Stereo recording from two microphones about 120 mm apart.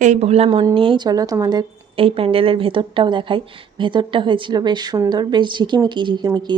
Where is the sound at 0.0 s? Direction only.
75° right (ahead or behind); by 1.6 s 30° right (ahead or behind).